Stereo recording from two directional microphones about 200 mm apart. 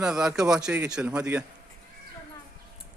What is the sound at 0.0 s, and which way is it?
A man's voice, 5° right (ahead or behind).